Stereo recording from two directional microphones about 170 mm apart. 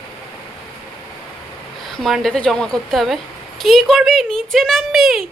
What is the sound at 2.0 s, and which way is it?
Speech, centre (ahead or behind).